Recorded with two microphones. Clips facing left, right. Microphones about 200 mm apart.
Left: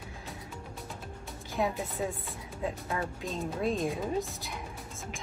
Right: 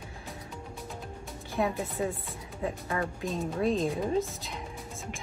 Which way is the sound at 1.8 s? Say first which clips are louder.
Right 2 dB; centre (ahead or behind).